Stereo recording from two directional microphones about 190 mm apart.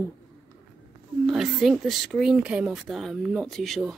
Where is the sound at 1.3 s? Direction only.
Centre (ahead or behind).